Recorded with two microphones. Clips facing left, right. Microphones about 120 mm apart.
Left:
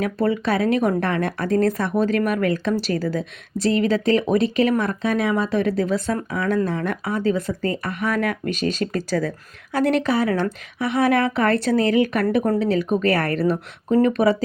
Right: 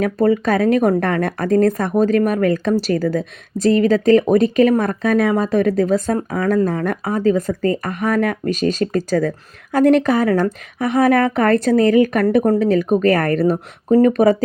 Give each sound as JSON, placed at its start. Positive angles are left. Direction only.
{"t": 0.0, "sound": "a woman's voice", "side_deg": -40}